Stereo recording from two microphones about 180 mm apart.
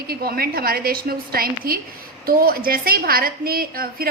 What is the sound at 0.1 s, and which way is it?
A woman's voice, 60° right (ahead or behind).